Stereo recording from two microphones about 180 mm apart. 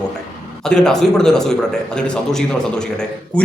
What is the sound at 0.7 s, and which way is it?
A man's voice, 5° left (ahead or behind).